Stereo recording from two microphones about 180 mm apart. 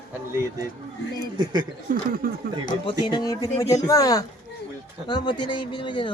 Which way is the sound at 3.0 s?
25° left (ahead or behind).